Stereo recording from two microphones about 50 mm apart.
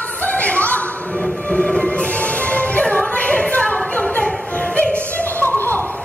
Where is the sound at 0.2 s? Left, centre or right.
Left.